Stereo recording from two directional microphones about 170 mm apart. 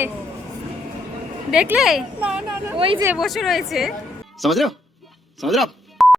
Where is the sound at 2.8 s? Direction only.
30° right (ahead or behind).